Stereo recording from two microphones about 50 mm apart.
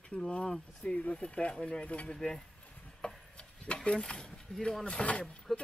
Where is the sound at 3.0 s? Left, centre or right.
Left.